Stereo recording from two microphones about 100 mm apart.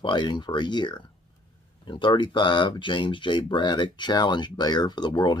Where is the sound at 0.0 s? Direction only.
50° left (ahead or behind).